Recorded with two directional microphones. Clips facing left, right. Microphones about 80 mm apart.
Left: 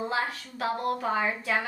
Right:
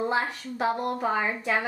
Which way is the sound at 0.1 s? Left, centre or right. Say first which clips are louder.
Right 3 dB; right.